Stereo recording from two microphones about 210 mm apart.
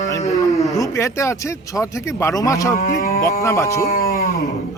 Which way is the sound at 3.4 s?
15° left (ahead or behind).